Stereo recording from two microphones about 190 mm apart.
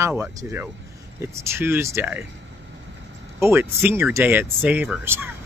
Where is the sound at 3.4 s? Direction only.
10° right (ahead or behind).